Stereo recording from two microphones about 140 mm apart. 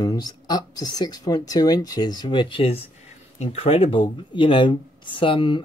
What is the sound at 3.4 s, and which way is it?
Speech, 50° left (ahead or behind).